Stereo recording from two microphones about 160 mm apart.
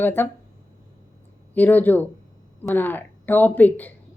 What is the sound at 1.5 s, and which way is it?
A woman's voice, 10° left (ahead or behind).